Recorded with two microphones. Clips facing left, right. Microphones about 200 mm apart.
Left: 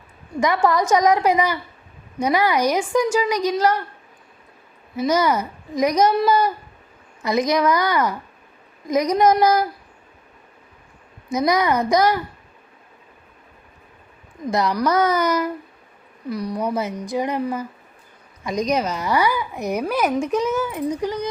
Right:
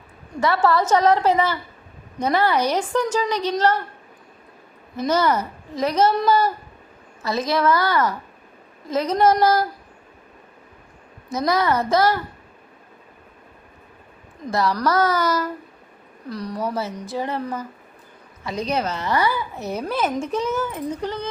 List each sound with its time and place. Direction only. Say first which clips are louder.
0.3 s speech: left 1 dB; 15° left (ahead or behind)
4.9 s speech: left 1 dB; 10° left (ahead or behind)
11.3 s speech: left 2 dB; 15° left (ahead or behind)
14.4 s speech: left 1 dB; 15° left (ahead or behind)